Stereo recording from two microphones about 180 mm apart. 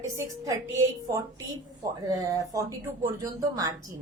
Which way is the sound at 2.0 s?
20° right (ahead or behind).